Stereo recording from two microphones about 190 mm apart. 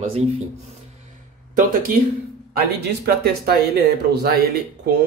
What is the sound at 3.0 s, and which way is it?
Speech, 55° right (ahead or behind).